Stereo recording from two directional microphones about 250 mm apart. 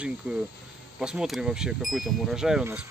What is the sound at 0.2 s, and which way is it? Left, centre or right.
Speech, centre.